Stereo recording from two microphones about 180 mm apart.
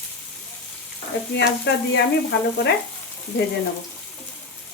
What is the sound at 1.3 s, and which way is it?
Stir, 70° left (ahead or behind).